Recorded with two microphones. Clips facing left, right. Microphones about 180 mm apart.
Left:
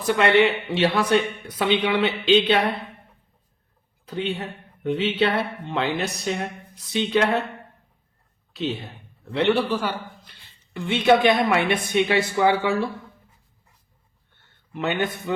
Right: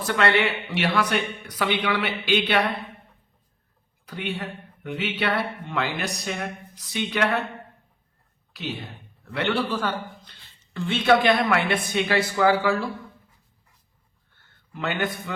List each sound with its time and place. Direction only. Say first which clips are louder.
0.0 s speech: left 4 dB; 20° left (ahead or behind)
4.0 s speech: left 4 dB; 25° left (ahead or behind)
9.2 s a man's voice: left 4 dB; 25° left (ahead or behind)
14.7 s a man's voice: left 3 dB; 20° left (ahead or behind)